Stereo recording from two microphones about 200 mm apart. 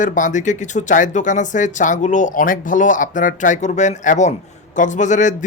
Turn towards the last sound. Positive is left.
turn(degrees=40)  # may be behind; listen again after turning